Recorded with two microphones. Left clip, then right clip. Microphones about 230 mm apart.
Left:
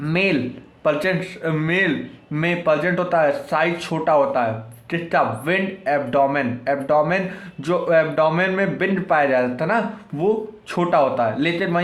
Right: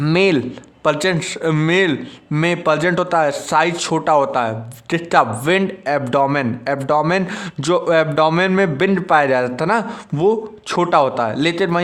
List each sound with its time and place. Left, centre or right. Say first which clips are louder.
0.0 s a man's voice: right 5 dB; right